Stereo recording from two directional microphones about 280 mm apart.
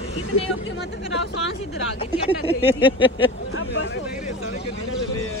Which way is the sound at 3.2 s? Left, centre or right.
Left.